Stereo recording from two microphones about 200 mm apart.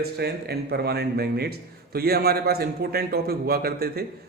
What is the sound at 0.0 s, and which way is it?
A man's voice, 55° right (ahead or behind).